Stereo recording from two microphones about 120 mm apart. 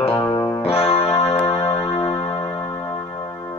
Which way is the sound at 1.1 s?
50° left (ahead or behind).